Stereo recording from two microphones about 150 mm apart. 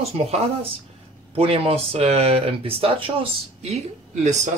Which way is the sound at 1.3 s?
40° right (ahead or behind).